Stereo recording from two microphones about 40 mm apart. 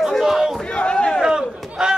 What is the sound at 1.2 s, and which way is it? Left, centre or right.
Speech, centre.